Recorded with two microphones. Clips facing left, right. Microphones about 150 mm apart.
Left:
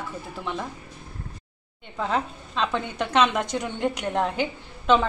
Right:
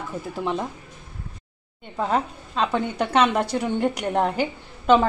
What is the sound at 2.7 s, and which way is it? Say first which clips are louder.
A woman's voice: right 3 dB; 10° right (ahead or behind).